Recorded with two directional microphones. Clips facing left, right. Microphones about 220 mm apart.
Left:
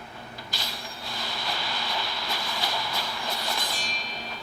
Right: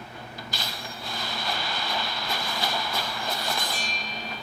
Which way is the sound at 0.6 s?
50° right (ahead or behind).